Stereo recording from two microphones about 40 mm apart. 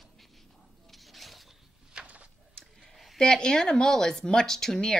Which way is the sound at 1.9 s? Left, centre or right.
Right.